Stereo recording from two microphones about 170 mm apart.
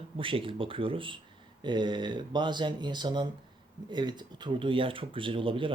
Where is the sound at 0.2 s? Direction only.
30° right (ahead or behind).